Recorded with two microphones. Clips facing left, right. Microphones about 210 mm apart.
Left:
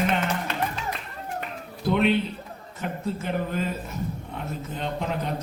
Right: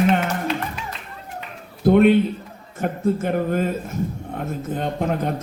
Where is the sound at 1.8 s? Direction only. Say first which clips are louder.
Right 8 dB; 50° right (ahead or behind).